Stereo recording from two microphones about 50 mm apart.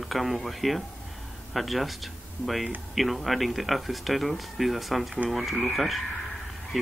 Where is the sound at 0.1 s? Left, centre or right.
Centre.